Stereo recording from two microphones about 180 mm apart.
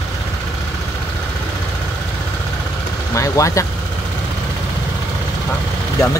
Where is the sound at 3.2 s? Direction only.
15° left (ahead or behind).